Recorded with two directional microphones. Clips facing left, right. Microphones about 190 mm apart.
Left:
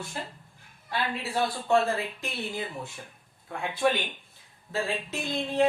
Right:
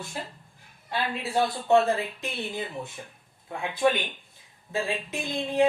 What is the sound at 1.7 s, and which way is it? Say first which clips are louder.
Speech: right 3 dB; 20° right (ahead or behind).